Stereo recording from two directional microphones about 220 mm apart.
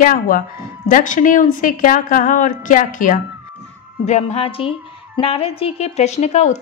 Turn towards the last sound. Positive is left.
turn(degrees=30)  # may be behind; listen again after turning